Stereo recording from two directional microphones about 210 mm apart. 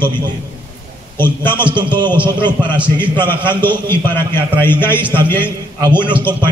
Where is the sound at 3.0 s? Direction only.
10° left (ahead or behind).